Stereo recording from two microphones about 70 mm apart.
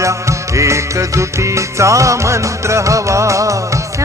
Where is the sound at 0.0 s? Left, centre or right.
Right.